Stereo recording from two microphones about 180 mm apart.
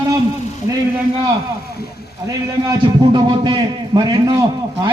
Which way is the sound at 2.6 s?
25° right (ahead or behind).